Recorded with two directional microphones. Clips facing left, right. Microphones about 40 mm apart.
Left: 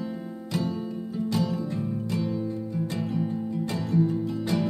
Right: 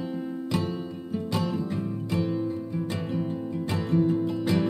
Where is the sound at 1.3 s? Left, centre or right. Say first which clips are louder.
Left 1 dB; right.